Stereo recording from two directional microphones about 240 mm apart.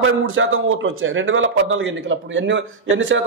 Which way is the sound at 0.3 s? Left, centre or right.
Right.